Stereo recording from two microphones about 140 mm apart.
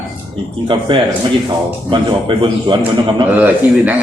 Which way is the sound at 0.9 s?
35° right (ahead or behind).